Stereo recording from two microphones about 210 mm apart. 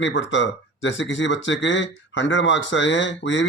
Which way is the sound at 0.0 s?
60° left (ahead or behind).